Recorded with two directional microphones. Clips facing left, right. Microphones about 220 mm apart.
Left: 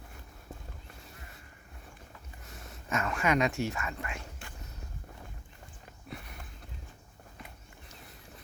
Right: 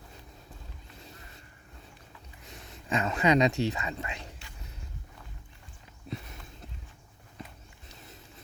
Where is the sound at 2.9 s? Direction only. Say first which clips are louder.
Right 4 dB; 20° right (ahead or behind).